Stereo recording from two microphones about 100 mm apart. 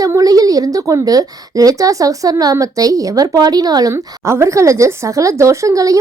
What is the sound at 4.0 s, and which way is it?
A woman's voice, 30° right (ahead or behind).